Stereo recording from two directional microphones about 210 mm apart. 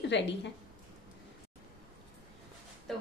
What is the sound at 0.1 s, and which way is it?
Speech, 55° left (ahead or behind).